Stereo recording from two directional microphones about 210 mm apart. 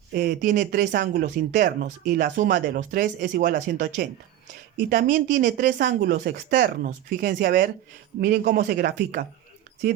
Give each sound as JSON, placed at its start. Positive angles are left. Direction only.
{"t": 0.1, "sound": "speech", "side_deg": -40}